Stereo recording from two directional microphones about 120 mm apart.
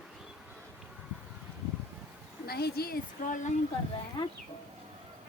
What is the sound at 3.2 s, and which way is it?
Speech, 90° left.